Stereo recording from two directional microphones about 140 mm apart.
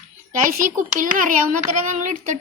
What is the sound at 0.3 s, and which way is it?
Speech, 70° right (ahead or behind).